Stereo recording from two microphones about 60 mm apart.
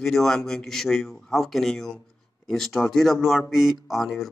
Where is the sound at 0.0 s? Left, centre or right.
Centre.